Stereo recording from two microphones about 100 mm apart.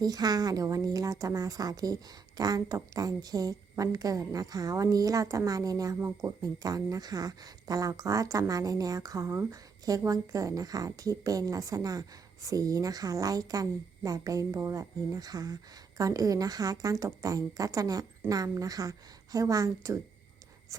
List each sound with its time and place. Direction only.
0.0 s speech: 40° right (ahead or behind)